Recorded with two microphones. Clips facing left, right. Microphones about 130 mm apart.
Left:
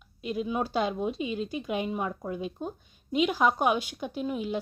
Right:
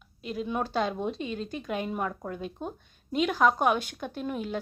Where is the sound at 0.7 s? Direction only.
15° left (ahead or behind).